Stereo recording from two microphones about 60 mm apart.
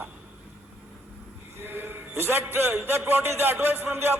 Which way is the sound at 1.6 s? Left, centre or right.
Right.